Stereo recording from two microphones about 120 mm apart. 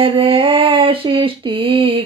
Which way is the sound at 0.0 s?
50° right (ahead or behind).